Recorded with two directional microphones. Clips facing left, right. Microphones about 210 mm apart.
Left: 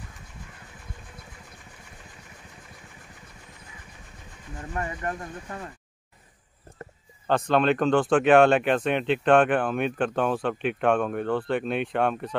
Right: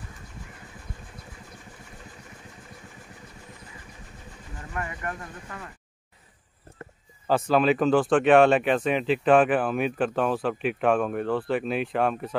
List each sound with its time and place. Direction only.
4.7 s speech: 30° left (ahead or behind)
7.2 s speech: 5° right (ahead or behind)